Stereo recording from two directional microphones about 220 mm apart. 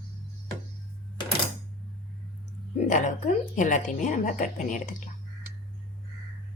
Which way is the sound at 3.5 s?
35° left (ahead or behind).